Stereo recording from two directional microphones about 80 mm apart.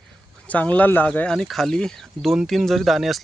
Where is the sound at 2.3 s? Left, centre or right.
Centre.